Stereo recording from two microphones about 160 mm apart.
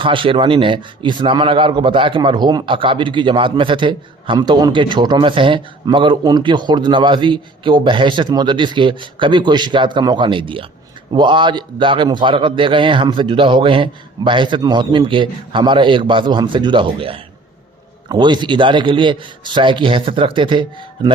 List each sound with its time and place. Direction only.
0.0 s a man's voice: 30° right (ahead or behind)